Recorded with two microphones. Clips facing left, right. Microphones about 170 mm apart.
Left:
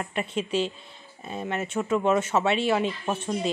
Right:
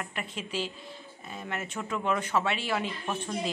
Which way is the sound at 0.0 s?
25° left (ahead or behind).